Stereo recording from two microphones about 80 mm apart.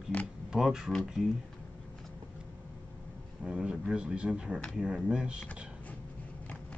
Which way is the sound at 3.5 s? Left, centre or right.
Centre.